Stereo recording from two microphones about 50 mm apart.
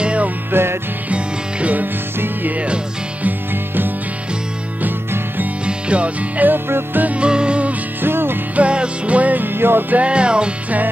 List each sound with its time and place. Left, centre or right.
0.0 s music: right
0.5 s music: right
1.1 s music: right
2.1 s music: right
5.7 s music: right
7.2 s music: centre
8.0 s music: right
8.5 s music: right
9.9 s music: right